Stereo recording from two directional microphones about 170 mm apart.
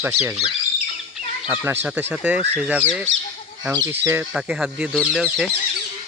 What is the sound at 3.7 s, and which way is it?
Speech, 20° right (ahead or behind).